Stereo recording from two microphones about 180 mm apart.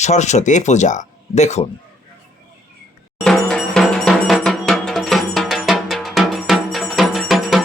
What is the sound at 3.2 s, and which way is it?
Music, 5° left (ahead or behind).